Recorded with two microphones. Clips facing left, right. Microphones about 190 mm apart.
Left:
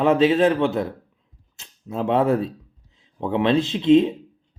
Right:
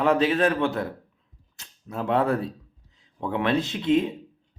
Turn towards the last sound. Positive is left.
turn(degrees=25)  # may be behind; listen again after turning